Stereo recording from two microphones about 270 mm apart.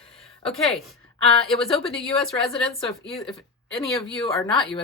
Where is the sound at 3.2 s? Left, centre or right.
Centre.